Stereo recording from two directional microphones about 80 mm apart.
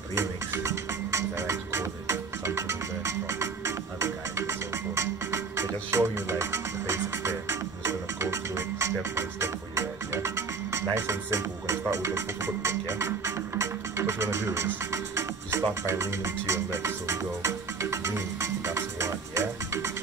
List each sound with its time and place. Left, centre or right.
0.1 s music: right